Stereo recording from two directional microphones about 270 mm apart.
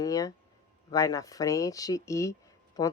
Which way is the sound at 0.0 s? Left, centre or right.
Centre.